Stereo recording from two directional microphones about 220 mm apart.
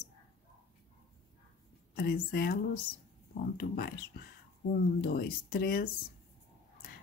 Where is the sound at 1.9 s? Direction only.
45° left (ahead or behind).